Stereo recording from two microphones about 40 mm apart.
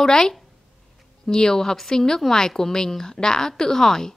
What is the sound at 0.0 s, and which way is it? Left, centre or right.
A woman's voice, centre.